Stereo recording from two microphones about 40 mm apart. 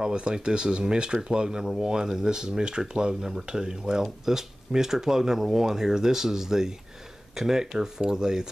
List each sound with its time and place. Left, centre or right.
0.0 s speech: right